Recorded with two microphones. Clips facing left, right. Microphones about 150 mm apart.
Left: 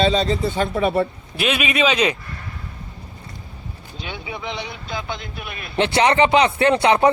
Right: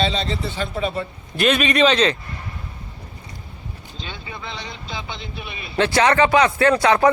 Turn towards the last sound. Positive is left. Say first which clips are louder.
# even
turn(degrees=25)  # may be behind; listen again after turning